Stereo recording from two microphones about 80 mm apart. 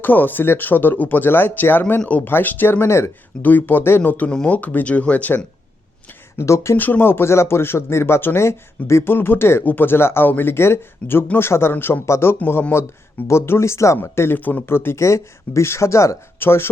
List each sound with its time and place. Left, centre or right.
0.0 s speech: left
6.3 s speech: left
6.7 s speech: left